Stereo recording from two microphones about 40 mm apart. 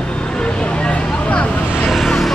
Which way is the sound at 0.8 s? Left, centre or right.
Left.